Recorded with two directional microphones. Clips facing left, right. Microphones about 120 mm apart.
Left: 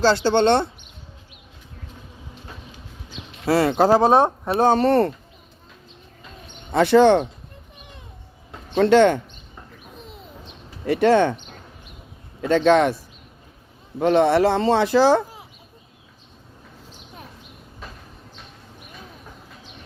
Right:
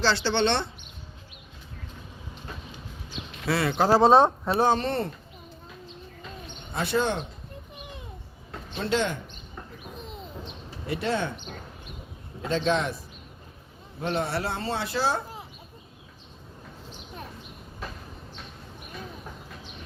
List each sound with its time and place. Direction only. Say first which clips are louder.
0.0 s speech: left 7 dB; 45° left (ahead or behind)
3.4 s speech: left 7 dB; 40° left (ahead or behind)
3.9 s speech: right 2 dB; 15° left (ahead or behind)
4.6 s speech: left 8 dB; 50° left (ahead or behind)
6.8 s a man's voice: left 12 dB; 75° left (ahead or behind)
8.7 s speech: left 13 dB; 65° left (ahead or behind)
10.8 s a man's voice: left 12 dB; 80° left
12.4 s a man's voice: left 9 dB; 75° left (ahead or behind)
14.0 s speech: left 12 dB; 90° left